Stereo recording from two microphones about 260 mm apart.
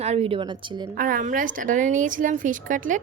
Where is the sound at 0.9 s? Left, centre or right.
Right.